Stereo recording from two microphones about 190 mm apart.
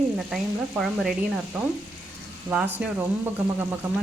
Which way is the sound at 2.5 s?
10° right (ahead or behind).